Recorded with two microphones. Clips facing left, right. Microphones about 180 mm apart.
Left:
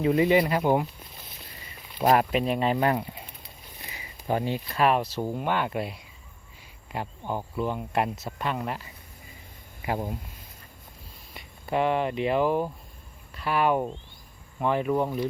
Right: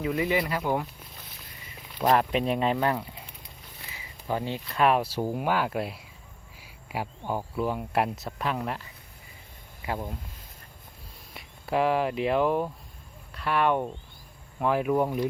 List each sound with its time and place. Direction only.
0.0 s speech: 25° left (ahead or behind)
2.0 s speech: 5° left (ahead or behind)
2.7 s speech: 15° left (ahead or behind)
3.8 s a sound: 20° left (ahead or behind)
4.8 s speech: centre (ahead or behind)
11.3 s speech: centre (ahead or behind)